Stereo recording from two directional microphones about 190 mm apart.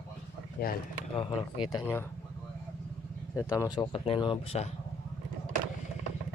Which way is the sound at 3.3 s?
15° left (ahead or behind).